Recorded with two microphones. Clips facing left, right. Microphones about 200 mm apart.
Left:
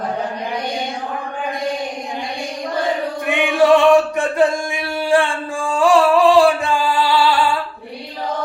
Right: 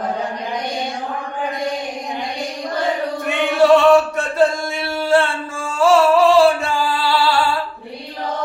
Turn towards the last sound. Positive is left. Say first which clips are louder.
# left 2 dB
turn(degrees=15)  # may be behind; listen again after turning